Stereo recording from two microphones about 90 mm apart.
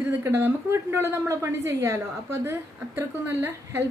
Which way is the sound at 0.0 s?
30° right (ahead or behind).